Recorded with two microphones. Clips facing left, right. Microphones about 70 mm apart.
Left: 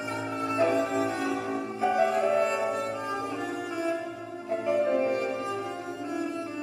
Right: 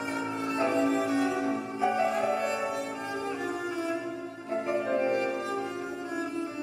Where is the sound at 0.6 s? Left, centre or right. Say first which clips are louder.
Left 1 dB; right.